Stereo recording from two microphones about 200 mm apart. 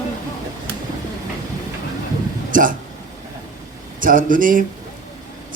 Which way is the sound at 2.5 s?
40° right (ahead or behind).